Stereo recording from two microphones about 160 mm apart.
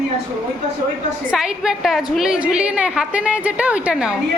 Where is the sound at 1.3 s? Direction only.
5° right (ahead or behind).